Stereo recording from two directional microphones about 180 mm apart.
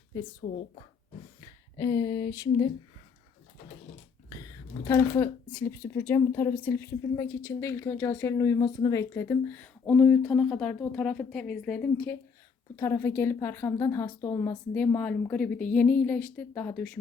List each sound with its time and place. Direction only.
0.4 s a woman's voice: 40° left (ahead or behind)
1.4 s speech: 20° left (ahead or behind)
4.3 s speech: 20° left (ahead or behind); by 11.9 s 5° left (ahead or behind)
12.7 s speech: 15° left (ahead or behind)